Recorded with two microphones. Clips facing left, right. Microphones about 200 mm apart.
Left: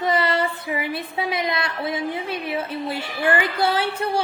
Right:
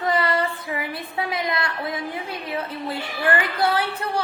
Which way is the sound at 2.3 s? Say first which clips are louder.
Left 3 dB; 25° left (ahead or behind).